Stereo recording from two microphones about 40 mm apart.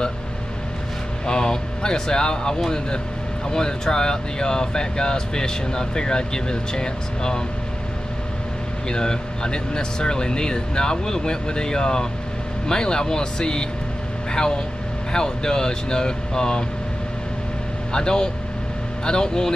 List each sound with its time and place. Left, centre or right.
1.2 s speech: centre
8.8 s speech: centre
17.9 s speech: centre